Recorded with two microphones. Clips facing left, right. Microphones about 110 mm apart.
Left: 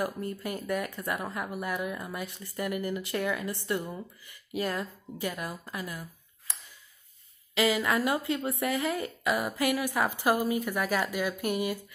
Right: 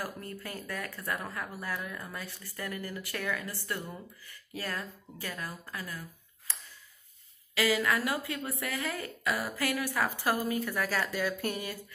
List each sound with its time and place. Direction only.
0.0 s a woman's voice: 20° left (ahead or behind)
7.5 s speech: 25° left (ahead or behind)